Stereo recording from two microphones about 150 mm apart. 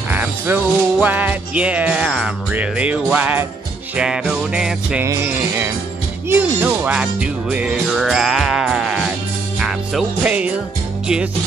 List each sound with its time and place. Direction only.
0.1 s music: 10° right (ahead or behind)
9.6 s speech: 5° right (ahead or behind)